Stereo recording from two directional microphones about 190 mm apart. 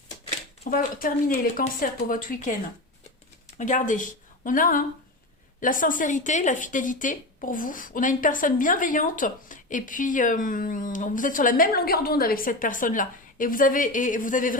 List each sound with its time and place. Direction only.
0.7 s a woman's voice: 45° left (ahead or behind)
3.6 s a woman's voice: 40° left (ahead or behind)